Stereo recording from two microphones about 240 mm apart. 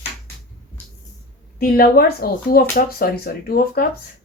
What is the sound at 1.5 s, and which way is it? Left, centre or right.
Speech, left.